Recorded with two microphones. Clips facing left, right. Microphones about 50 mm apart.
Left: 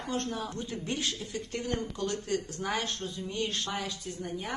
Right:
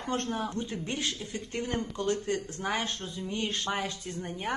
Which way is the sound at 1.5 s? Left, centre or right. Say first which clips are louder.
Right 2 dB; right.